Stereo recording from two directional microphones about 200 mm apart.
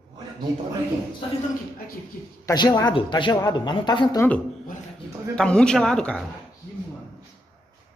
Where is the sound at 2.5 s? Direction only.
20° left (ahead or behind).